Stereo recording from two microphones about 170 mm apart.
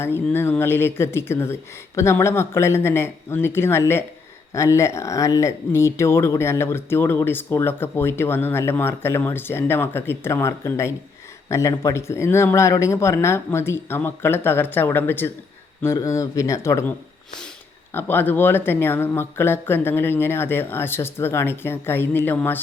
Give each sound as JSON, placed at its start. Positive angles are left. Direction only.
{"t": 0.0, "sound": "speech", "side_deg": 15}
{"t": 17.9, "sound": "speech", "side_deg": 10}